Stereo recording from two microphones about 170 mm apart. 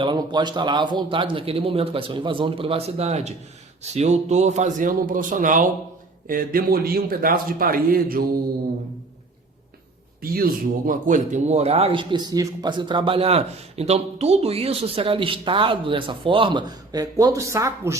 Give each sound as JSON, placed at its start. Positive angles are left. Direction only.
{"t": 0.0, "sound": "a man's voice", "side_deg": -25}
{"t": 10.3, "sound": "speech", "side_deg": -60}